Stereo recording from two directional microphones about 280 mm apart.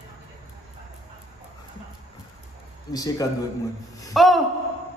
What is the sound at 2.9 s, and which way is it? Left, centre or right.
Speech, centre.